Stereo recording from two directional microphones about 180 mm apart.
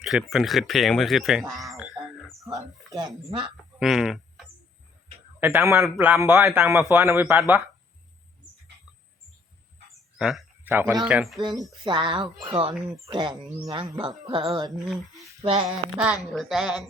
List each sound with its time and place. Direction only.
0.0 s speech: centre (ahead or behind)
2.9 s speech: 20° right (ahead or behind)
3.8 s speech: centre (ahead or behind)
5.4 s a man's voice: 10° right (ahead or behind)
10.2 s a sound: 5° right (ahead or behind)
11.0 s speech: 5° right (ahead or behind)
11.8 s speech: 25° right (ahead or behind)
16.0 s speech: 5° right (ahead or behind)